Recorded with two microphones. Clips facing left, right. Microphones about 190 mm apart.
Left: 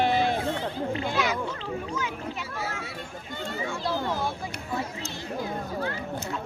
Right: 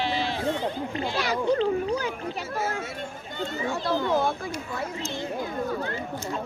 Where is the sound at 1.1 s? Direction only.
35° right (ahead or behind).